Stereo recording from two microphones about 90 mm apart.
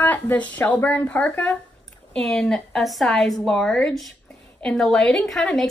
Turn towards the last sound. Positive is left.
turn(degrees=5)  # may be behind; listen again after turning